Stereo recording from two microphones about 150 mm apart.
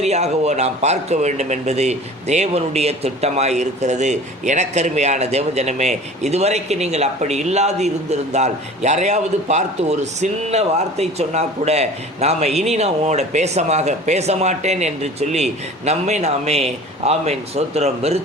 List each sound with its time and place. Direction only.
0.0 s speech: 45° right (ahead or behind)